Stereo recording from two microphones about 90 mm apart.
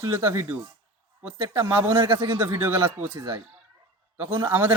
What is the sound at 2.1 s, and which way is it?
Speech, 70° right (ahead or behind).